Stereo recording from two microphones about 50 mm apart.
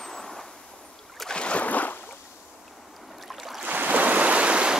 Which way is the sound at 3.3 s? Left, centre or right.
Centre.